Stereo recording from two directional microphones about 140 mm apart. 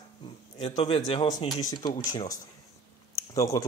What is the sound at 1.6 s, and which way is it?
Speech, 25° left (ahead or behind).